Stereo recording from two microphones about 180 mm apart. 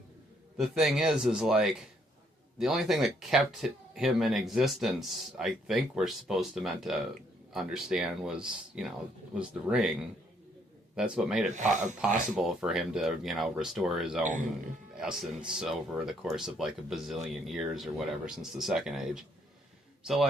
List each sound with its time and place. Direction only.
0.5 s speech: centre (ahead or behind)
11.5 s speech: 45° right (ahead or behind)
12.4 s speech: 5° right (ahead or behind)
14.2 s speech: 45° right (ahead or behind)
14.9 s speech: 5° right (ahead or behind)